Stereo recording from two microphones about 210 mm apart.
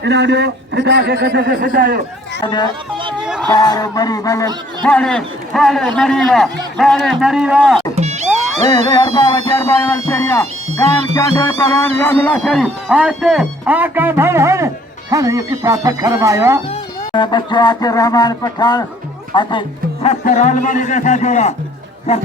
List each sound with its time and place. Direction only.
0.0 s a man's voice: 55° right (ahead or behind)
2.4 s speech: 20° left (ahead or behind)
3.5 s honk: 20° left (ahead or behind)
4.8 s music: 5° left (ahead or behind)
7.9 s music: 30° right (ahead or behind)
8.6 s speech: 20° left (ahead or behind)
10.1 s honk: 10° left (ahead or behind)
11.1 s music: 15° left (ahead or behind); by 14.7 s 15° right (ahead or behind)
15.1 s speech: 15° right (ahead or behind)
17.1 s speech: 20° left (ahead or behind)
20.2 s speech: 35° left (ahead or behind)